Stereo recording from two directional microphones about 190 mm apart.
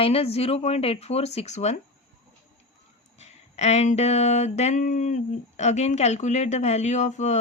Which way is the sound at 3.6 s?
35° left (ahead or behind).